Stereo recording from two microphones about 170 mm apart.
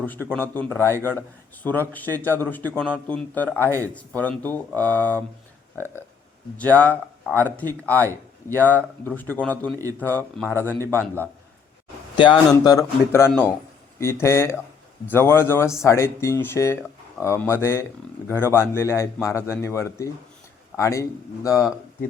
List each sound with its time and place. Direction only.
0.0 s a man's voice: 10° left (ahead or behind)
6.6 s a man's voice: 10° left (ahead or behind)
12.1 s speech: 30° left (ahead or behind)
12.6 s a man's voice: 20° left (ahead or behind)